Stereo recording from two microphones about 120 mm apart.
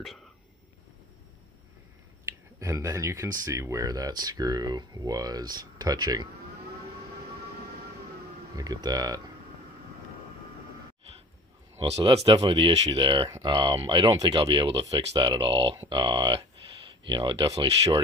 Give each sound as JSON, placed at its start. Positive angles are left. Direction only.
{"t": 0.0, "sound": "speech", "side_deg": 0}
{"t": 2.6, "sound": "speech", "side_deg": -25}
{"t": 8.5, "sound": "speech", "side_deg": -30}
{"t": 11.7, "sound": "a sound", "side_deg": -65}
{"t": 12.0, "sound": "speech", "side_deg": -50}
{"t": 12.3, "sound": "speech", "side_deg": -35}
{"t": 12.5, "sound": "speech", "side_deg": -45}
{"t": 17.6, "sound": "speech", "side_deg": -50}